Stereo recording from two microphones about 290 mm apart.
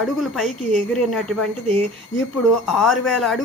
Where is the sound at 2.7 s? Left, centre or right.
Centre.